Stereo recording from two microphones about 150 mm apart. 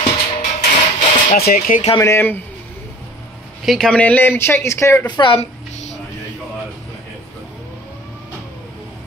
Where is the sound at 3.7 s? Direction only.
5° left (ahead or behind); by 5.2 s 20° left (ahead or behind).